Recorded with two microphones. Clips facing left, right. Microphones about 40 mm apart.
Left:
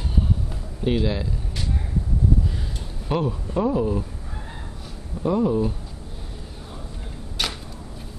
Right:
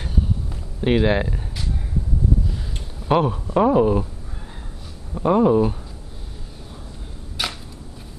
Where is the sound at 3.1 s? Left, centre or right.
Right.